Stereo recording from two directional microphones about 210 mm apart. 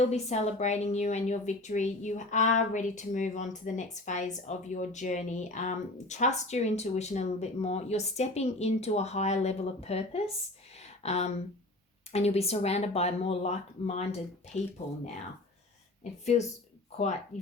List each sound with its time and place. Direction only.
0.0 s a woman's voice: 30° left (ahead or behind)
10.8 s a sound: 30° left (ahead or behind)
12.1 s a woman's voice: 30° left (ahead or behind)
16.2 s a woman's voice: 30° left (ahead or behind)